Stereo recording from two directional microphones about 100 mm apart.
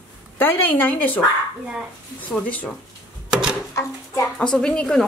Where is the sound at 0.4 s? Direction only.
20° left (ahead or behind).